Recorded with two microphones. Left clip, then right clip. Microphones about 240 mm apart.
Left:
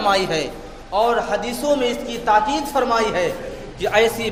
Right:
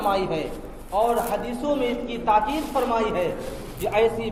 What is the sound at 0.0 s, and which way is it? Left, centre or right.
A woman's voice, left.